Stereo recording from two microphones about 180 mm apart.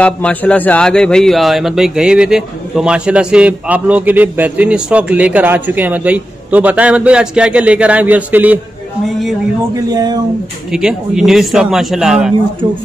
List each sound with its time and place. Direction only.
0.0 s a man's voice: 5° left (ahead or behind); by 8.5 s 10° right (ahead or behind)
9.8 s speech: 20° right (ahead or behind)
10.7 s a man's voice: 5° right (ahead or behind)
12.6 s speech: 25° right (ahead or behind)